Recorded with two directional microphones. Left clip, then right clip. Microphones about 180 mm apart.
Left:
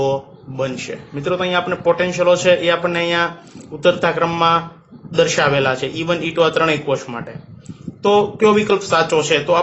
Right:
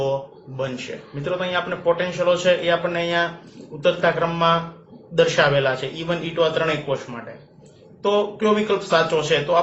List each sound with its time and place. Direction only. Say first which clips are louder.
0.0 s a man's voice: left 4 dB; 45° left (ahead or behind)